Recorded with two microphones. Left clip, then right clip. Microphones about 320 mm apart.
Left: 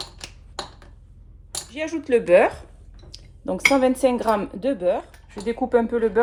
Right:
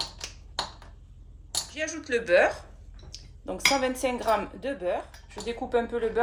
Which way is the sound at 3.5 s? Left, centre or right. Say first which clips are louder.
Left 7 dB; left.